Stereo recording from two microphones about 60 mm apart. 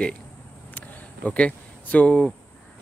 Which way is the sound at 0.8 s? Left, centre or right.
Left.